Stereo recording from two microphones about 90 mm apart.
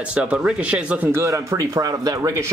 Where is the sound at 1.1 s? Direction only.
35° right (ahead or behind).